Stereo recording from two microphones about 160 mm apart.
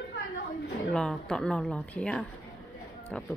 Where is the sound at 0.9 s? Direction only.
5° left (ahead or behind).